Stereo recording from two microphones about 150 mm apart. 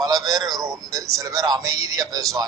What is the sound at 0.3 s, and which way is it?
Speech, 25° right (ahead or behind).